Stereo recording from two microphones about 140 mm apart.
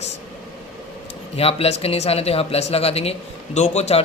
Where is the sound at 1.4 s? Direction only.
45° left (ahead or behind).